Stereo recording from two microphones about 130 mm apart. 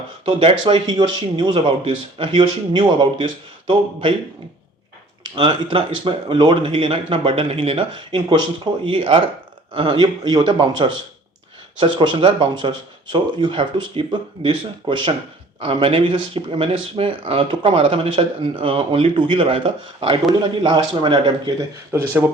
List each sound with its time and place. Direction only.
0.3 s speech: 45° right (ahead or behind)
5.3 s speech: 40° right (ahead or behind)
21.9 s speech: 20° right (ahead or behind)